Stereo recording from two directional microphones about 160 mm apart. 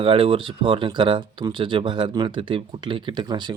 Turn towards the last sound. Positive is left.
turn(degrees=-30)  # may be behind; listen again after turning